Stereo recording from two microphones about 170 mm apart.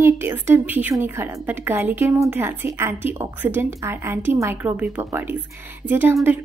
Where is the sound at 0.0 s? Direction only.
15° right (ahead or behind).